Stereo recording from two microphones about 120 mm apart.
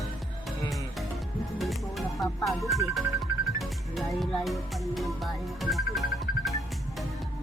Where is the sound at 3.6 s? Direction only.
Centre (ahead or behind).